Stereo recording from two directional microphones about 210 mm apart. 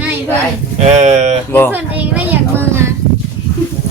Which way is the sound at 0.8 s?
35° right (ahead or behind).